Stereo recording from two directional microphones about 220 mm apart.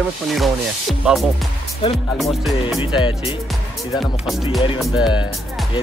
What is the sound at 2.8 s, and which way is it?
Speech, 20° left (ahead or behind).